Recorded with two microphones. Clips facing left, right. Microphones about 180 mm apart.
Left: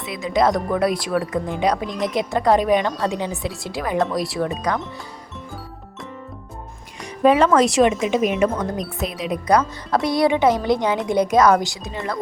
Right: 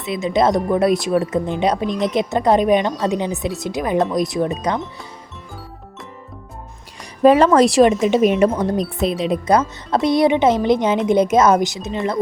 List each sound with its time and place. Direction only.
0.0 s a woman's voice: 25° right (ahead or behind)
7.2 s a woman's voice: 35° right (ahead or behind); by 12.2 s 20° right (ahead or behind)